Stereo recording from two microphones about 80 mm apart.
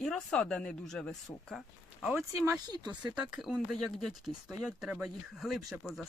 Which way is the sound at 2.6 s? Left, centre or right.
Right.